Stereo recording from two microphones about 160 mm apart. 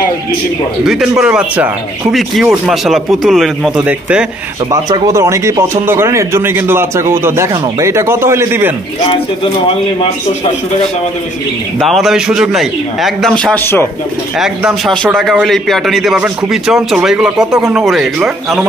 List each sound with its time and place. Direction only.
0.8 s a man's voice: centre (ahead or behind)
4.6 s a man's voice: 20° right (ahead or behind)
9.0 s speech: 35° left (ahead or behind)
11.8 s a man's voice: centre (ahead or behind)